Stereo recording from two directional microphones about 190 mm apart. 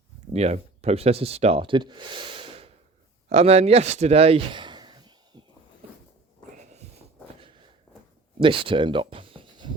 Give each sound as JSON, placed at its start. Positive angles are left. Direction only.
{"t": 0.3, "sound": "speech", "side_deg": -35}
{"t": 8.4, "sound": "speech", "side_deg": -25}